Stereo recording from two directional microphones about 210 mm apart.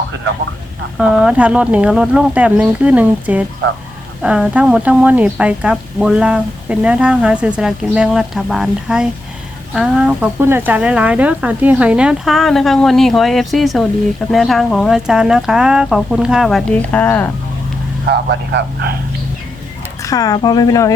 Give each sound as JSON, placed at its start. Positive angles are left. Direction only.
{"t": 0.9, "sound": "speech", "side_deg": -5}
{"t": 18.1, "sound": "speech", "side_deg": -55}
{"t": 20.0, "sound": "speech", "side_deg": 15}